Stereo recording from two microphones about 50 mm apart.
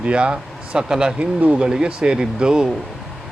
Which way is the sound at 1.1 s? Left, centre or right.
Right.